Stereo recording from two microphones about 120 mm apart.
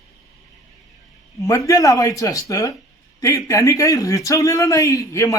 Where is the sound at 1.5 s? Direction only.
25° left (ahead or behind).